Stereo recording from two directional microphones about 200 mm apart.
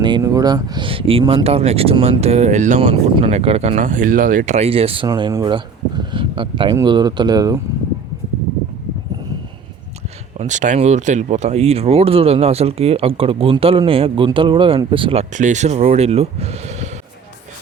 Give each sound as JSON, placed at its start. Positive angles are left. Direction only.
{"t": 0.0, "sound": "speech", "side_deg": -20}
{"t": 10.3, "sound": "speech", "side_deg": -35}